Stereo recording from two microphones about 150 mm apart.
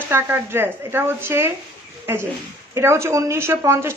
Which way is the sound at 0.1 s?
15° right (ahead or behind).